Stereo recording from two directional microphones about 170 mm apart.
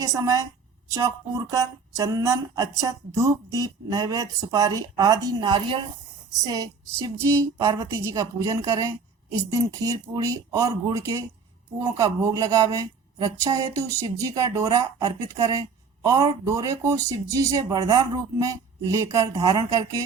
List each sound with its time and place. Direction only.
0.0 s a woman's voice: 20° right (ahead or behind)